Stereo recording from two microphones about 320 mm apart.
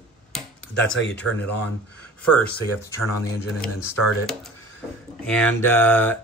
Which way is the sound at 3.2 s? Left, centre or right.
Centre.